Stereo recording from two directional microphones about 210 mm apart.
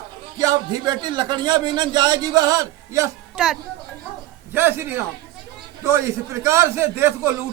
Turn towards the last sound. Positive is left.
turn(degrees=-10)  # may be behind; listen again after turning